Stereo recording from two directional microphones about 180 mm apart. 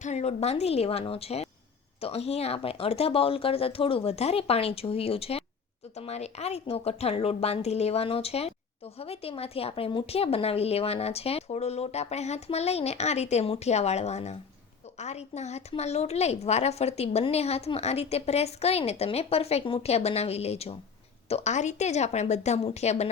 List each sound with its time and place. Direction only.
0.0 s a woman's voice: 40° left (ahead or behind)